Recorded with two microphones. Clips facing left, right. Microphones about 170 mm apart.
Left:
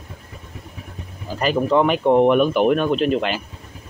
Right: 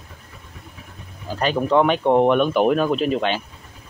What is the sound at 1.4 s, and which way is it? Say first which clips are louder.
Speech: even; 5° left (ahead or behind).